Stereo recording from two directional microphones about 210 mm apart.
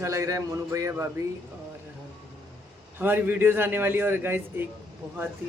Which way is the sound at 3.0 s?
10° right (ahead or behind).